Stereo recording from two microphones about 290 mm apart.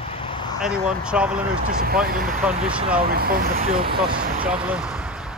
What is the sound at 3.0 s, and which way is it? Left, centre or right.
Speech, right.